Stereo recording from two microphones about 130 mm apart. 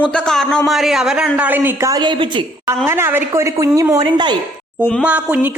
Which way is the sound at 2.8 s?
20° right (ahead or behind).